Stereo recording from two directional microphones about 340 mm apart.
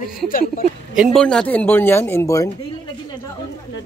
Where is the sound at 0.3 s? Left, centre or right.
Left.